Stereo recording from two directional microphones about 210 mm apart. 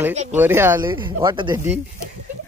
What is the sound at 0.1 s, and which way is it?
Speech, 35° right (ahead or behind).